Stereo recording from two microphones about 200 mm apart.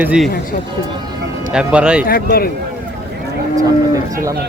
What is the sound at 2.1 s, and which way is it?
Speech, 50° left (ahead or behind).